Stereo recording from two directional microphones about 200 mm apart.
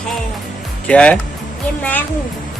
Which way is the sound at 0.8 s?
5° left (ahead or behind).